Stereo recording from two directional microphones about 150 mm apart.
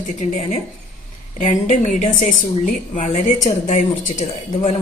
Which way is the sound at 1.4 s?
55° left (ahead or behind).